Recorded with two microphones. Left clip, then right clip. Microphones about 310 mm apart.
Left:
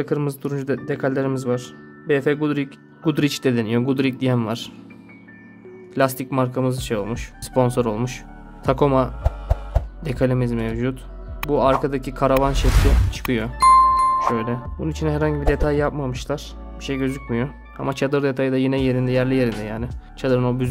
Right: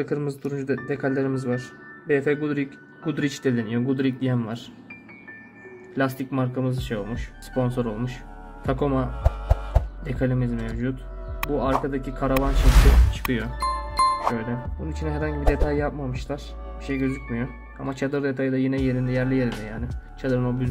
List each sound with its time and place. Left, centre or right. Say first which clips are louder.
0.0 s speech: left 3 dB; left
5.9 s speech: left 6 dB; left
9.2 s music: even; centre
10.0 s speech: left 7 dB; left
11.4 s speech: left 5 dB; centre
11.8 s speech: left 6 dB; left
12.4 s speech: left 4 dB; centre
13.6 s music: left 12 dB; centre
14.3 s speech: left 6 dB; left